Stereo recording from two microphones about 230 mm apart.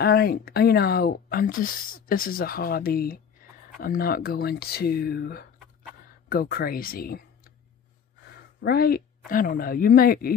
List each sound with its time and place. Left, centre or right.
0.0 s speech: left
8.6 s speech: left